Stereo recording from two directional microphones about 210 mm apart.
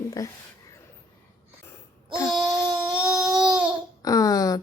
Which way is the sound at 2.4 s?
5° right (ahead or behind).